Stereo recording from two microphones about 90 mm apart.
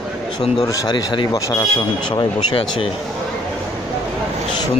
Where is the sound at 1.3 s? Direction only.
45° left (ahead or behind).